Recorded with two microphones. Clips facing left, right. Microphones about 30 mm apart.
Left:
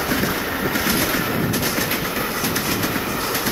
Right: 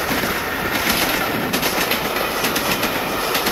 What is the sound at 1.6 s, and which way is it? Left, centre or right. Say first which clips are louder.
Train: right 3 dB; right.